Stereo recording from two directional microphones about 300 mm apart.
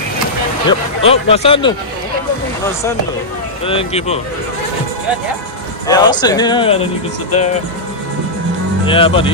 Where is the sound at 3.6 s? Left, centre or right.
Centre.